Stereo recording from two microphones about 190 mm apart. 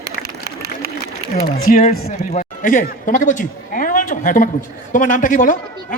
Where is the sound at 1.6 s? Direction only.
50° left (ahead or behind).